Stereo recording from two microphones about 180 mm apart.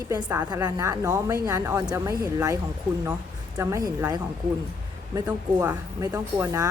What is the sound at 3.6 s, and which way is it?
Speech, 20° right (ahead or behind).